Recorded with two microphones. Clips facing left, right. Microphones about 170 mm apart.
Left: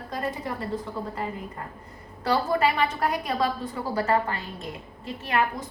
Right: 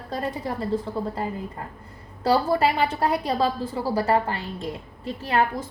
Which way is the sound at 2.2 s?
35° right (ahead or behind).